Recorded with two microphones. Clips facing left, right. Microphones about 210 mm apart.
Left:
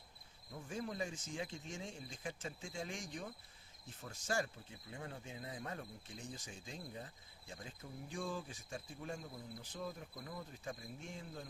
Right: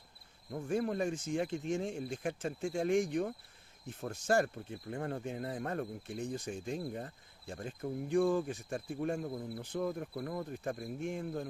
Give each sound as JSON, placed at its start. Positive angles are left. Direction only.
{"t": 0.5, "sound": "speech", "side_deg": -60}